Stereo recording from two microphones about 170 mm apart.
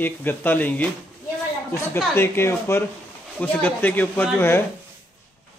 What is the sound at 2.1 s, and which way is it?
Speech, 15° left (ahead or behind).